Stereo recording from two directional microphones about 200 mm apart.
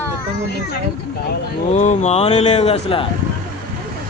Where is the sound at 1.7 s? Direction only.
35° left (ahead or behind).